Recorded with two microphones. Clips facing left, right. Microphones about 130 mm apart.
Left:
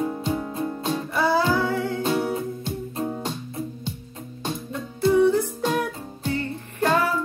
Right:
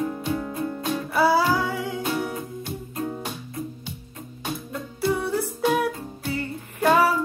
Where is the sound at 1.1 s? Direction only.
5° right (ahead or behind).